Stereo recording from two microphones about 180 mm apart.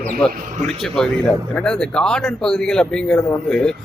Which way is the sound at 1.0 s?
Centre (ahead or behind).